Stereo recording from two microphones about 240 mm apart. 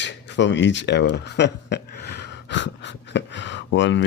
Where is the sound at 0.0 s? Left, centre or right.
Left.